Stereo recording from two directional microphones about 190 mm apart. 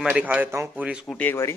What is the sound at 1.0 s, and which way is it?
Speech, 5° left (ahead or behind).